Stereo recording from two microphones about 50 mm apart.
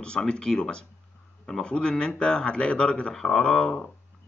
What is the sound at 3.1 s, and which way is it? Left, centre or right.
Speech, centre.